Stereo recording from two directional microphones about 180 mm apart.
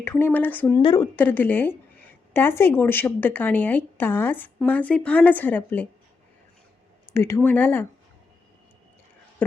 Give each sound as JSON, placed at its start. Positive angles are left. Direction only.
{"t": 0.0, "sound": "a woman's voice", "side_deg": 10}
{"t": 0.8, "sound": "a woman's voice", "side_deg": 30}
{"t": 1.1, "sound": "a woman's voice", "side_deg": 10}
{"t": 7.1, "sound": "a woman's voice", "side_deg": 15}